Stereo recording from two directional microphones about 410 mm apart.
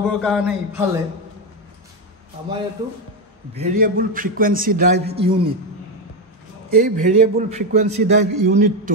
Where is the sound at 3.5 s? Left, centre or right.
Centre.